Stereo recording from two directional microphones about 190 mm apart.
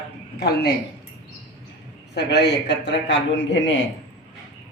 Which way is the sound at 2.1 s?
60° left (ahead or behind).